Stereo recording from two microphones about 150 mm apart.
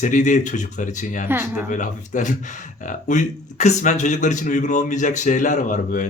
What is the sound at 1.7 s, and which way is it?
Speech, 60° left (ahead or behind).